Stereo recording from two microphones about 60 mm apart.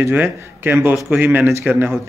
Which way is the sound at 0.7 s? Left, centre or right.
Right.